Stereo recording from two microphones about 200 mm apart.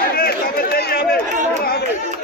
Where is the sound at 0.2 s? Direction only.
50° left (ahead or behind).